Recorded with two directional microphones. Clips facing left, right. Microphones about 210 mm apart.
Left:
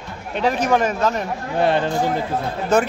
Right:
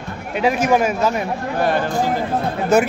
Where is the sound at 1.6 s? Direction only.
25° left (ahead or behind).